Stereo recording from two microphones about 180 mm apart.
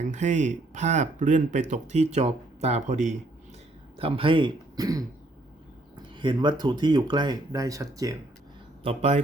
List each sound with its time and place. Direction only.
0.1 s speech: 40° right (ahead or behind); by 8.1 s 20° right (ahead or behind)
8.8 s speech: 35° right (ahead or behind)